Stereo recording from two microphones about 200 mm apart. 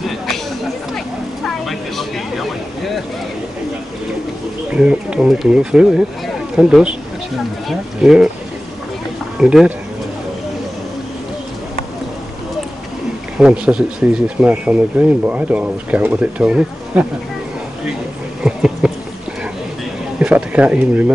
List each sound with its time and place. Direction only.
0.9 s vehicle: centre (ahead or behind)
4.7 s speech: 5° right (ahead or behind)
9.4 s speech: 5° right (ahead or behind)
13.4 s speech: 5° right (ahead or behind)
18.4 s a sound: 5° right (ahead or behind)
20.2 s speech: 5° right (ahead or behind)